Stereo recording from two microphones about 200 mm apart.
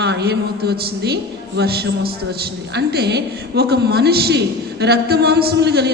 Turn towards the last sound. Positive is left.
turn(degrees=-55)  # may be behind; listen again after turning